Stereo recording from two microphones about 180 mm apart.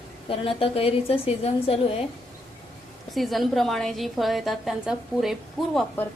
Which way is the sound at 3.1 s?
Centre (ahead or behind).